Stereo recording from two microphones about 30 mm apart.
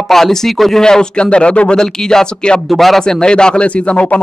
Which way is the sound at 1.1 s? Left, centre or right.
Left.